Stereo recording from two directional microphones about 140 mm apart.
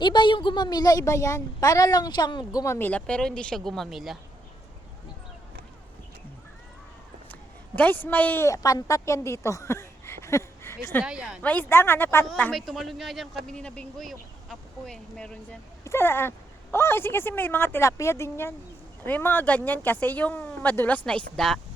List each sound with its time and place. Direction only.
0.0 s a woman's voice: 35° left (ahead or behind)
2.7 s speech: 10° left (ahead or behind)
7.8 s a woman's voice: 10° left (ahead or behind)
11.0 s speech: 5° right (ahead or behind)
11.4 s speech: 15° left (ahead or behind)
15.8 s speech: 20° left (ahead or behind)